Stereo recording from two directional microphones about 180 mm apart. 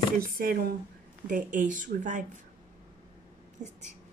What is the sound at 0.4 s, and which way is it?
Speech, 55° right (ahead or behind).